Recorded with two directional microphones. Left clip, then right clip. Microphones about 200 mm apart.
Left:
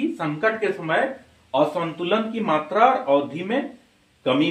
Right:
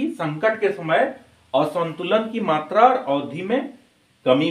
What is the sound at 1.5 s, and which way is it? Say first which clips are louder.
Speech: right 1 dB; 45° right (ahead or behind).